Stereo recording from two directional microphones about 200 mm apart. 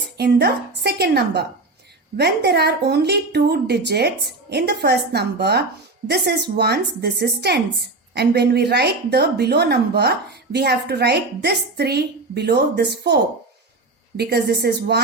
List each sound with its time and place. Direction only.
0.2 s a woman's voice: 55° right (ahead or behind)
14.2 s speech: 55° right (ahead or behind)